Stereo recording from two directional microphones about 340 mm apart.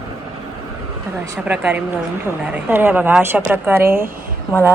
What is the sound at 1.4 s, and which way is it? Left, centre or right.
Speech, centre.